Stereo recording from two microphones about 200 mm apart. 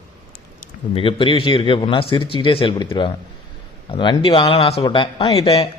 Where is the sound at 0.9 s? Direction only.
25° left (ahead or behind).